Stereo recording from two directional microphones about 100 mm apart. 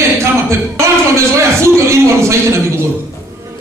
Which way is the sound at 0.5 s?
30° right (ahead or behind).